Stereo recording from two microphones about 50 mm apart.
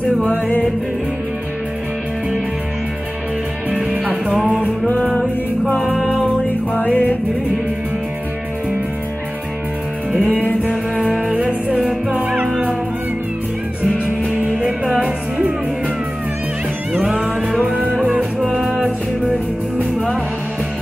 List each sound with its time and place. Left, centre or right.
0.3 s music: left
3.7 s music: right
5.7 s music: left
6.7 s music: left
11.0 s music: centre
14.4 s music: centre
15.0 s music: right
16.9 s music: centre
18.0 s music: right